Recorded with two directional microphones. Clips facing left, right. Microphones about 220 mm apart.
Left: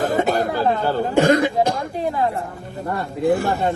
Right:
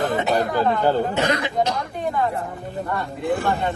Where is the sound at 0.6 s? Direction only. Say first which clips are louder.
Even; 40° left (ahead or behind).